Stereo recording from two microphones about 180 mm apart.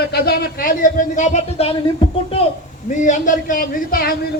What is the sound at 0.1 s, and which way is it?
Speech, 60° left (ahead or behind).